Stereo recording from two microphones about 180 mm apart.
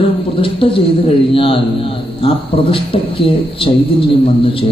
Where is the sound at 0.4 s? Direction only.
30° left (ahead or behind).